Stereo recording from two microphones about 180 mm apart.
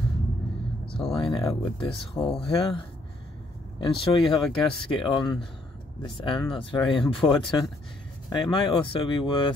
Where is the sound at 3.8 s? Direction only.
25° left (ahead or behind).